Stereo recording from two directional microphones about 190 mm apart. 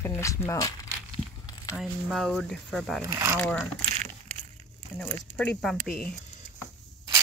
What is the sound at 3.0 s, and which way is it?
Speech, 15° right (ahead or behind).